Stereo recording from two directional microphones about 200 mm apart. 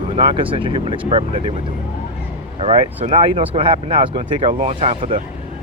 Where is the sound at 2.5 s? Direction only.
30° right (ahead or behind).